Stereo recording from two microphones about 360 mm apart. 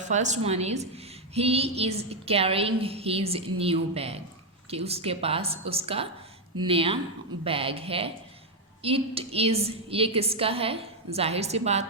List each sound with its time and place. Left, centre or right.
0.1 s a woman's voice: centre